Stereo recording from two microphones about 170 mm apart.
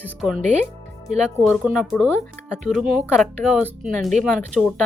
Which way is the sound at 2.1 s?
10° left (ahead or behind).